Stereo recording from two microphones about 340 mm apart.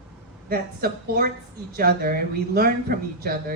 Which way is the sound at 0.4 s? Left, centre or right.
Right.